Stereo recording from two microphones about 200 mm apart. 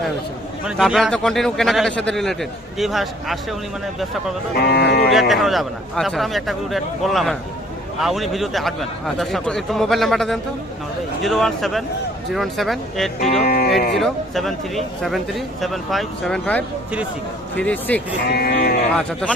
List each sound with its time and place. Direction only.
0.6 s a man's voice: centre (ahead or behind)
4.5 s speech: 50° left (ahead or behind)
5.3 s a man's voice: centre (ahead or behind)
13.4 s speech: 50° left (ahead or behind)
13.9 s a man's voice: centre (ahead or behind)
18.3 s speech: 50° left (ahead or behind)